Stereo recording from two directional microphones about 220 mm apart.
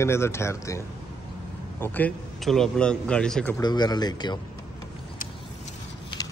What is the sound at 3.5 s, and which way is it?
Speech, 20° left (ahead or behind).